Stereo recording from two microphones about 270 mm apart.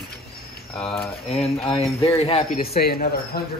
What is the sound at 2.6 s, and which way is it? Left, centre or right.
Speech, left.